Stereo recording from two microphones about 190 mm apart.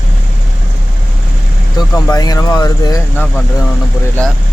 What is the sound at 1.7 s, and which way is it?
Speech, 20° left (ahead or behind).